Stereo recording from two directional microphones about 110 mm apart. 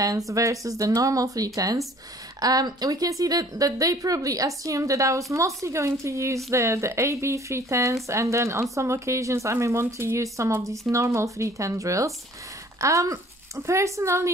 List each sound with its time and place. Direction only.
0.3 s a woman's voice: 30° right (ahead or behind)